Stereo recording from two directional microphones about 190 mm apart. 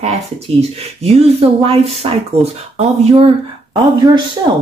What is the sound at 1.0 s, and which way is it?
Speech, 30° right (ahead or behind).